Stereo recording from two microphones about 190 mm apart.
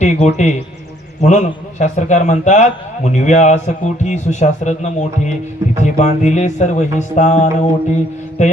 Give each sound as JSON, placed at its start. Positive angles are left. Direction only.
{"t": 0.0, "sound": "a man's voice", "side_deg": 35}